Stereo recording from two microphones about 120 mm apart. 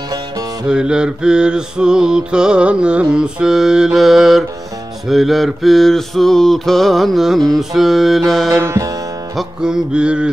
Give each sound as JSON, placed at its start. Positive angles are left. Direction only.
{"t": 0.7, "sound": "mantra", "side_deg": -5}
{"t": 8.5, "sound": "music", "side_deg": -25}
{"t": 9.3, "sound": "mantra", "side_deg": -5}